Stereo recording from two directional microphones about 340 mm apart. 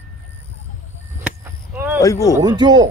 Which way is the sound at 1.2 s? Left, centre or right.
Centre.